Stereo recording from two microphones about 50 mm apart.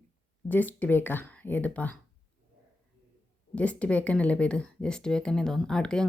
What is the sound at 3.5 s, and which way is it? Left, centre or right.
Speech, left.